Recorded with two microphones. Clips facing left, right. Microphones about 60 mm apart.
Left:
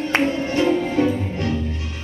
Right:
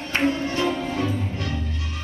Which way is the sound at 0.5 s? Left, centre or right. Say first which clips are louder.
Left 6 dB; left.